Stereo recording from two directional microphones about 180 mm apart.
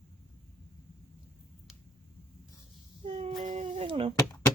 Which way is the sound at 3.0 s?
35° right (ahead or behind).